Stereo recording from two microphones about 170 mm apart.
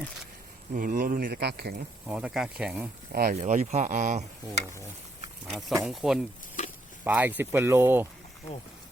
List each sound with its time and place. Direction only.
0.7 s speech: 55° right (ahead or behind); by 1.7 s 70° right (ahead or behind)
2.0 s speech: 5° right (ahead or behind)
3.1 s speech: 65° right (ahead or behind)
3.3 s speech: 45° right (ahead or behind)
5.5 s speech: centre (ahead or behind)
6.6 s a sound: 45° left (ahead or behind)
7.0 s speech: 10° right (ahead or behind)